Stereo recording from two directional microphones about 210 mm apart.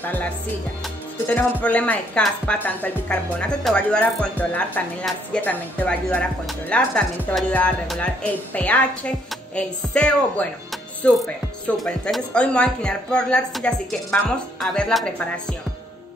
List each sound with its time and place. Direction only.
0.0 s music: 10° left (ahead or behind)
1.3 s speech: 5° left (ahead or behind)